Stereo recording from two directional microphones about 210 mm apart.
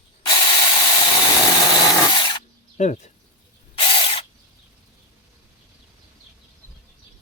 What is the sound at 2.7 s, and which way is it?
Speech, 35° left (ahead or behind).